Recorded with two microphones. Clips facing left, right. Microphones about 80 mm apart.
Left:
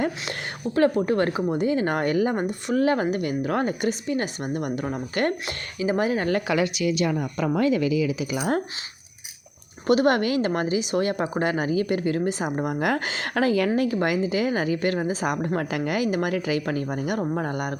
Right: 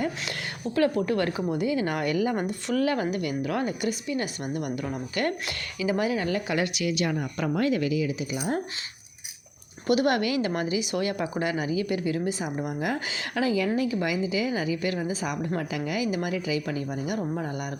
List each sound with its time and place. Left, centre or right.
0.9 s speech: left
1.6 s a woman's voice: left
2.4 s a woman's voice: left
8.3 s speech: left
9.8 s a woman's voice: left